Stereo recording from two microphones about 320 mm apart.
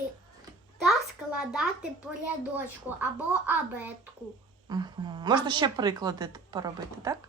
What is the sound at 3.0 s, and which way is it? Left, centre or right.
A child's voice, centre.